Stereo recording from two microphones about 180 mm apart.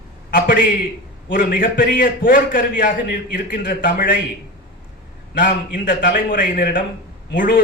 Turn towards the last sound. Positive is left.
turn(degrees=55)  # may be behind; listen again after turning